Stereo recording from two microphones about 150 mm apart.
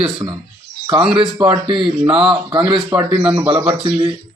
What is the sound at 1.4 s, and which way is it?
A man's voice, 35° right (ahead or behind).